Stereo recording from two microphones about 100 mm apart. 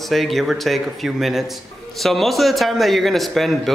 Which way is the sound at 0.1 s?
Centre (ahead or behind).